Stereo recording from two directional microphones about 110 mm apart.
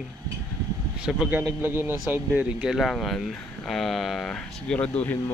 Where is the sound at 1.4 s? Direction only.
20° right (ahead or behind).